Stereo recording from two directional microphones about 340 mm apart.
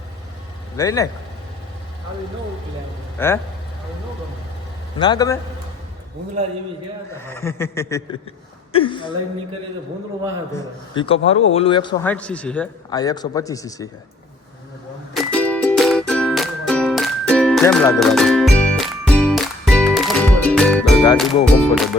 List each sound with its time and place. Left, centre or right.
0.8 s a man's voice: centre
3.2 s a man's voice: centre
4.9 s a man's voice: centre
7.3 s a man's voice: centre
10.9 s a man's voice: centre
15.1 s music: centre